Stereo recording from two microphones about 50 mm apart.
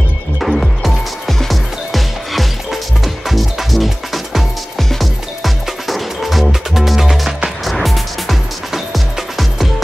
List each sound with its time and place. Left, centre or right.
0.4 s music: centre